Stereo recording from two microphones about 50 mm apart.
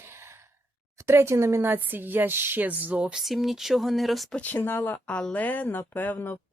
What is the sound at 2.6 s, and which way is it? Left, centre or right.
Speech, right.